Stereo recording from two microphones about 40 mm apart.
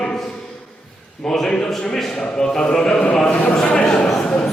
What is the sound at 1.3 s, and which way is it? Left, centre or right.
Speech, centre.